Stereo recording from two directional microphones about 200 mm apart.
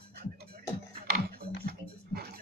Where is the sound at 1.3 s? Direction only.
50° right (ahead or behind).